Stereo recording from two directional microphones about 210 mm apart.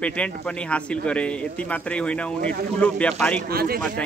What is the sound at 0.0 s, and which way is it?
Speech, 5° left (ahead or behind).